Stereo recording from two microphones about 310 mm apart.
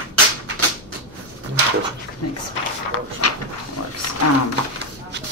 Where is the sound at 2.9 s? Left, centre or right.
Left.